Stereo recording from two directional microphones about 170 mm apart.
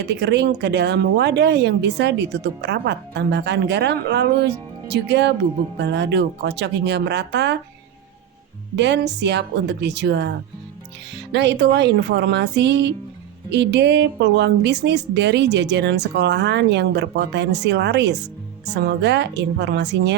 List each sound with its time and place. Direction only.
0.1 s speech: 90° right
8.7 s speech: 90° right
11.3 s speech: 90° right